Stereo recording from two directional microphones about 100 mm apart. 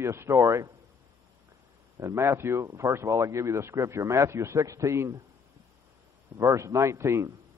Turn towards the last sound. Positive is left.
turn(degrees=-30)  # may be behind; listen again after turning